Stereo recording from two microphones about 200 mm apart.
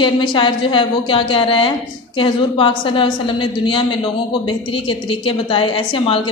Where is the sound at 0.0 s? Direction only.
25° left (ahead or behind).